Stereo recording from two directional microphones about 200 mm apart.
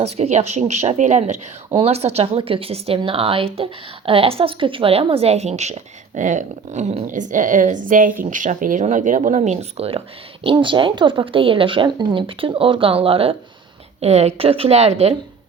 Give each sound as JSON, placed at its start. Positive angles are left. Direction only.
{"t": 0.0, "sound": "a woman's voice", "side_deg": -30}